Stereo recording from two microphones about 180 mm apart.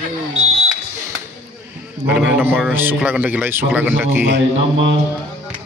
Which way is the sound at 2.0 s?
10° right (ahead or behind).